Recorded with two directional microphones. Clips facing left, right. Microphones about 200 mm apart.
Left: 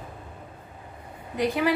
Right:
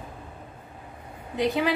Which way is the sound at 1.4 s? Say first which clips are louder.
Even; 20° right (ahead or behind).